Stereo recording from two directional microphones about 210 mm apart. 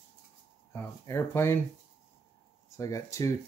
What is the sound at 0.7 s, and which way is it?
Speech, 10° left (ahead or behind).